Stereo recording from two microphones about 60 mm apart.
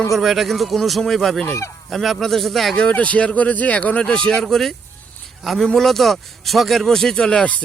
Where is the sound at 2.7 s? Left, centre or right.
Left.